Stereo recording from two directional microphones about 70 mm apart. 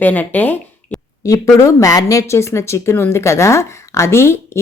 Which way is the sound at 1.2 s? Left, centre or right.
Left.